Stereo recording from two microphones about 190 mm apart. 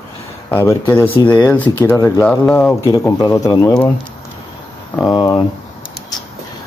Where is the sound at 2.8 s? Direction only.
15° left (ahead or behind).